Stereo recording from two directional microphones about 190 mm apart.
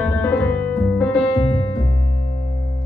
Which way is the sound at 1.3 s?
20° left (ahead or behind).